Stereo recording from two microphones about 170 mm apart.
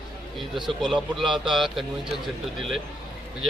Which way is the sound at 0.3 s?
Centre (ahead or behind).